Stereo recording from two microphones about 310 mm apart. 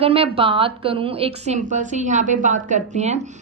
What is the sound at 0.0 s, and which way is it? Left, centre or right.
A woman's voice, centre.